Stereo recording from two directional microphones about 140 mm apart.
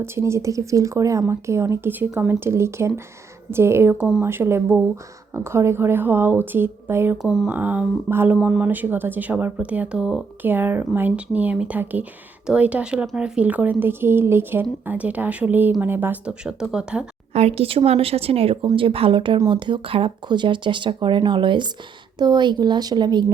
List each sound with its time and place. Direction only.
0.0 s speech: 20° right (ahead or behind)
3.9 s speech: 5° right (ahead or behind)
4.2 s speech: 15° right (ahead or behind)
7.2 s speech: 5° right (ahead or behind)
17.3 s speech: 45° right (ahead or behind); by 23.2 s 30° right (ahead or behind)